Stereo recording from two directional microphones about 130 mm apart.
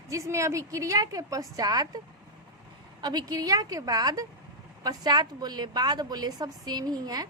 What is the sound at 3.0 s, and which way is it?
A woman's voice, 30° right (ahead or behind).